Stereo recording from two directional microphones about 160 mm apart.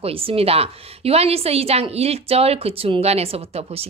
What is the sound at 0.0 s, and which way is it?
A woman's voice, 35° right (ahead or behind).